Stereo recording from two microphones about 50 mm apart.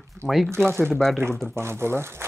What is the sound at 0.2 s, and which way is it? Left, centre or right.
Speech, right.